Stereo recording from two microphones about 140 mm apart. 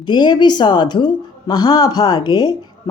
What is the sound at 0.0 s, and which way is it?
A woman's voice, 30° left (ahead or behind).